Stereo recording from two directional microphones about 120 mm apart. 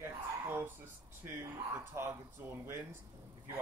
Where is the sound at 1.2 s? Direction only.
20° right (ahead or behind).